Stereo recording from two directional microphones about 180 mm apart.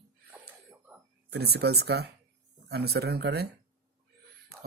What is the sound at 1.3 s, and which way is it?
Speech, 65° right (ahead or behind).